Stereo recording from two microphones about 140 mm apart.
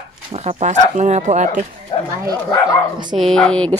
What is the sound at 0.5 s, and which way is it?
Speech, 55° right (ahead or behind).